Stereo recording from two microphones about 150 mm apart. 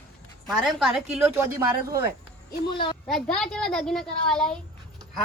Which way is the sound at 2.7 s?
35° left (ahead or behind).